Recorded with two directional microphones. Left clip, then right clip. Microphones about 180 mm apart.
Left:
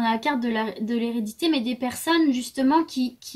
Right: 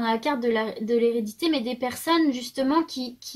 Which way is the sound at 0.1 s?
15° left (ahead or behind).